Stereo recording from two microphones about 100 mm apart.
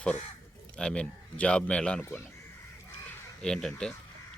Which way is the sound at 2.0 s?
25° left (ahead or behind).